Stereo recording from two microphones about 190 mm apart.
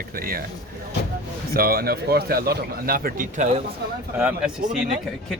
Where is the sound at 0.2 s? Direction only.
50° right (ahead or behind).